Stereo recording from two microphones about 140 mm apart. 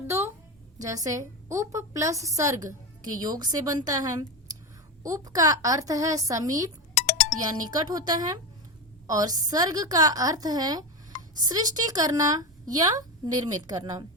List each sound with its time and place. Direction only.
0.8 s a woman's voice: 25° right (ahead or behind)